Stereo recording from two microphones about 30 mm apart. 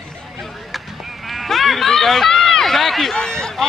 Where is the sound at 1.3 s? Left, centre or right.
Centre.